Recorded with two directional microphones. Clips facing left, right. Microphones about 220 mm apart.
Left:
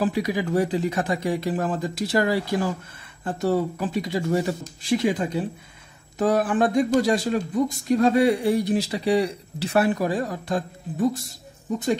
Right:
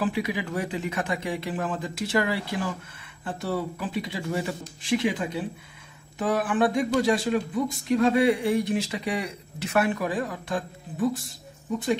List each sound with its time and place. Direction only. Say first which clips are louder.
0.0 s speech: left 4 dB; 40° left (ahead or behind)